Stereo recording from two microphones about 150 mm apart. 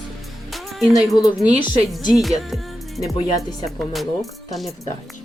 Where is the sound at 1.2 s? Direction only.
25° left (ahead or behind).